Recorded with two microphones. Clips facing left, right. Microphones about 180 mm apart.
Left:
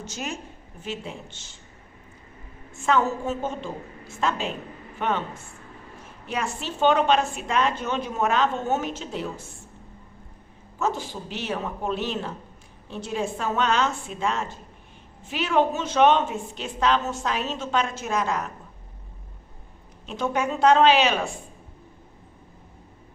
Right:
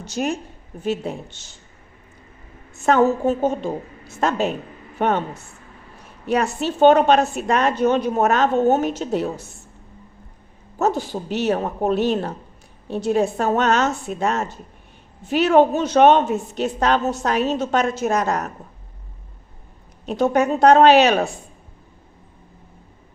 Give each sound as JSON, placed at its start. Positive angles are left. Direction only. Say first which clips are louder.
{"t": 0.0, "sound": "a woman's voice", "louder": "right 9 dB", "side_deg": -60}
{"t": 0.8, "sound": "speech", "louder": "right 10 dB", "side_deg": -40}
{"t": 2.7, "sound": "a woman's voice", "louder": "right 6 dB", "side_deg": -45}
{"t": 6.2, "sound": "a woman's voice", "louder": "right 9 dB", "side_deg": -40}
{"t": 10.8, "sound": "a woman's voice", "louder": "right 6 dB", "side_deg": -40}
{"t": 20.1, "sound": "a woman's voice", "louder": "right 8 dB", "side_deg": -40}